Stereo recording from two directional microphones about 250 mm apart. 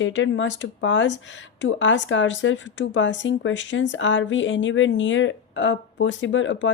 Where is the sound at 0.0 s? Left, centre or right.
Left.